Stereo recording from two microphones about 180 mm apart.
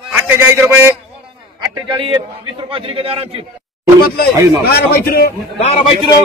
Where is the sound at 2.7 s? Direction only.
30° right (ahead or behind).